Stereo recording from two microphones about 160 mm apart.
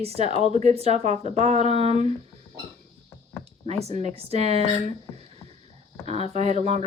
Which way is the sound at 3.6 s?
40° right (ahead or behind).